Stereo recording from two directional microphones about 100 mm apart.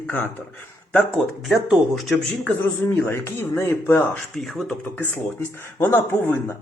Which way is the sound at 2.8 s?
25° left (ahead or behind).